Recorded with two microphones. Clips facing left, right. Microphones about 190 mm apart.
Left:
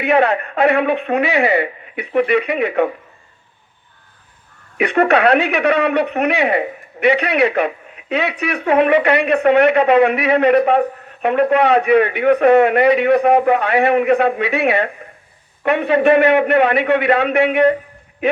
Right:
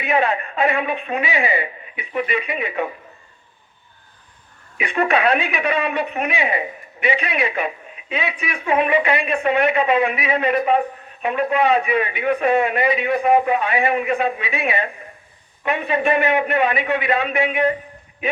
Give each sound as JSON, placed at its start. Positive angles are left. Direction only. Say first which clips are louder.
{"t": 0.0, "sound": "speech", "louder": "left 5 dB", "side_deg": 65}
{"t": 4.8, "sound": "speech", "louder": "left 5 dB", "side_deg": 65}